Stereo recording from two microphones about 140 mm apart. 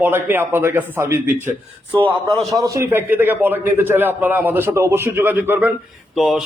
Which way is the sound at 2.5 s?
25° right (ahead or behind).